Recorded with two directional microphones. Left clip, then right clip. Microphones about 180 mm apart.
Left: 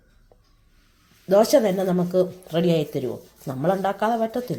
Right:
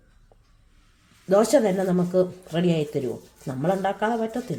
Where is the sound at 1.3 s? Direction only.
Centre (ahead or behind).